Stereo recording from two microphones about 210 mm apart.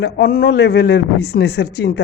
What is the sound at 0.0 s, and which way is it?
A woman's voice, 45° left (ahead or behind).